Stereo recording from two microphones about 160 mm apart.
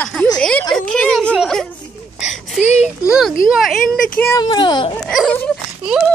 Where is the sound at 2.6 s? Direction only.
45° left (ahead or behind).